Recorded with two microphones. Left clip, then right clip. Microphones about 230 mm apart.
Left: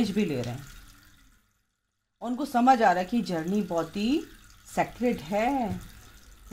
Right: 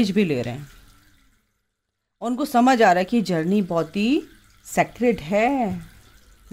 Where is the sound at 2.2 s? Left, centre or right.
Right.